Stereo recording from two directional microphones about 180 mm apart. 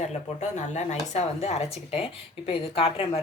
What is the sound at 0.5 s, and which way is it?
A woman's voice, 40° left (ahead or behind).